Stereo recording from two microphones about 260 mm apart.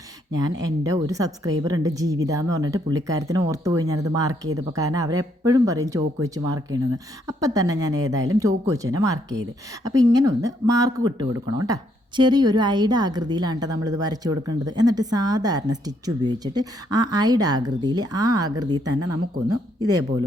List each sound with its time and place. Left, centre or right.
0.6 s speech: centre